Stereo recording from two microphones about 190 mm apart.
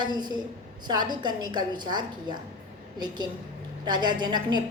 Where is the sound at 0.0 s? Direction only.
20° right (ahead or behind).